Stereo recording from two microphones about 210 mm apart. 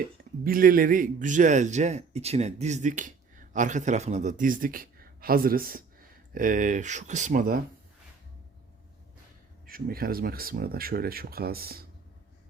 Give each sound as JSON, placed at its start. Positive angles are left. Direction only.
{"t": 0.4, "sound": "a man's voice", "side_deg": -45}
{"t": 9.6, "sound": "speech", "side_deg": -45}